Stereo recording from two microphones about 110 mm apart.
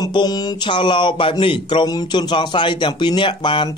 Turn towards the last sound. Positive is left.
turn(degrees=50)  # may be behind; listen again after turning